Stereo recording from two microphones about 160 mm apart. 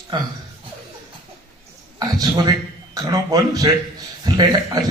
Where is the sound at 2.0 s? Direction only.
25° right (ahead or behind).